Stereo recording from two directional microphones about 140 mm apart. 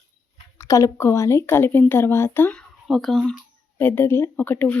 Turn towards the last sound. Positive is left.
turn(degrees=15)  # may be behind; listen again after turning